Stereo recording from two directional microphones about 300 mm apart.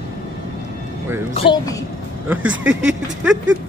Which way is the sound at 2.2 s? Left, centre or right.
Centre.